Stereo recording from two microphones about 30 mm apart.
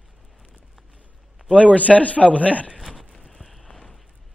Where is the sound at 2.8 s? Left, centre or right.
Centre.